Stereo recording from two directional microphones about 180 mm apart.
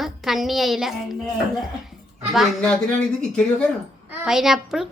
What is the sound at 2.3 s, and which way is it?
Speech, 5° left (ahead or behind).